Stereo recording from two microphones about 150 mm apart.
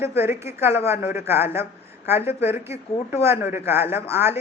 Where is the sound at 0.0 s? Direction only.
15° right (ahead or behind).